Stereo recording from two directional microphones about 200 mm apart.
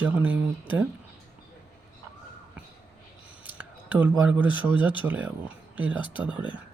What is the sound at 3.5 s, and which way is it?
Speech, 10° right (ahead or behind).